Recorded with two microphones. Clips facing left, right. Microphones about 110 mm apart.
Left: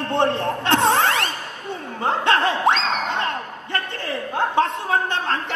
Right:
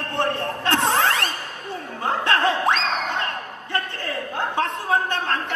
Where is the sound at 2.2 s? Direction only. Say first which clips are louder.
Left 2 dB; 20° left (ahead or behind).